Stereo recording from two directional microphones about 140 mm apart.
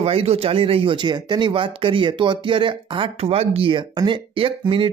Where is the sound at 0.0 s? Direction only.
45° right (ahead or behind).